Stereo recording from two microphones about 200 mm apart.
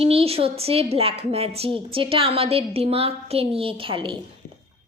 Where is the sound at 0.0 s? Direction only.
30° right (ahead or behind).